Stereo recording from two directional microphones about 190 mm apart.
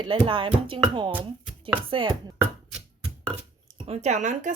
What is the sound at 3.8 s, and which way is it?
Speech, 35° right (ahead or behind).